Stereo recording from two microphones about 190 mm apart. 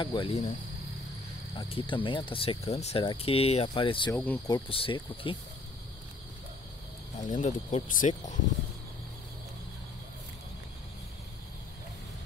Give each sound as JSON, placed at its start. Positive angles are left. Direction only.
{"t": 0.0, "sound": "speech", "side_deg": 30}
{"t": 1.5, "sound": "speech", "side_deg": 25}
{"t": 4.1, "sound": "speech", "side_deg": 5}
{"t": 4.5, "sound": "speech", "side_deg": 25}
{"t": 7.2, "sound": "speech", "side_deg": 40}